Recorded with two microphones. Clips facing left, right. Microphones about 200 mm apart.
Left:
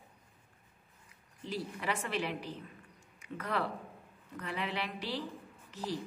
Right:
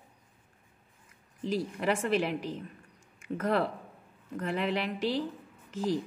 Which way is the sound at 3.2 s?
45° right (ahead or behind).